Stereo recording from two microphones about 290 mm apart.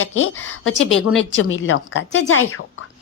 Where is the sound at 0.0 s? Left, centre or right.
Left.